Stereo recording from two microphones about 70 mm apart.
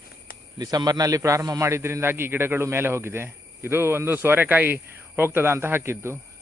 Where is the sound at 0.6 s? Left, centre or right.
Right.